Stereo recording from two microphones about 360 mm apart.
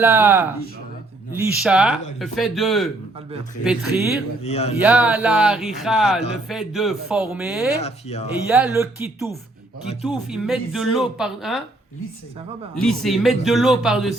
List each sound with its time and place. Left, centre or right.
0.0 s speech: centre
4.4 s speech: centre
4.8 s speech: centre
7.8 s speech: centre
8.4 s speech: centre
12.7 s speech: centre